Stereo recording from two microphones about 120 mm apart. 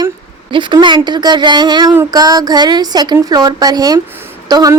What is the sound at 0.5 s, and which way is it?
A woman's voice, 40° right (ahead or behind).